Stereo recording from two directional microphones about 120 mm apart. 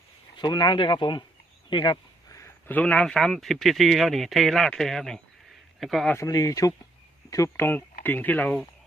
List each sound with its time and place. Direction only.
0.3 s speech: 35° left (ahead or behind)
1.7 s a sound: 40° left (ahead or behind)
2.4 s speech: 15° left (ahead or behind)
6.1 s speech: 30° left (ahead or behind)